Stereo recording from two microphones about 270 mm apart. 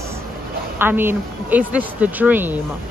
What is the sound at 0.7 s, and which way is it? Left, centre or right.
Speech, centre.